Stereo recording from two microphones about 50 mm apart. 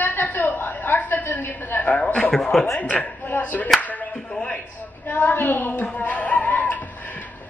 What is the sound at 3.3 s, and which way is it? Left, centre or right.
Clapping, left.